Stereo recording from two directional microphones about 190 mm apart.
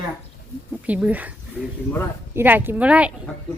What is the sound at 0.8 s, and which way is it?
Speech, 10° right (ahead or behind).